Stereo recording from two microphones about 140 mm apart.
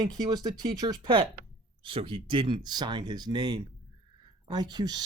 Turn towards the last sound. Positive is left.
turn(degrees=-30)  # may be behind; listen again after turning